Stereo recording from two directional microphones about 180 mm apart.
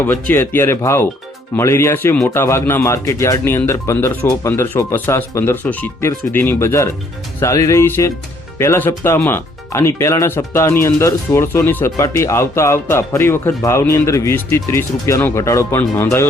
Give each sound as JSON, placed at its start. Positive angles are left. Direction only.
{"t": 0.0, "sound": "speech", "side_deg": 10}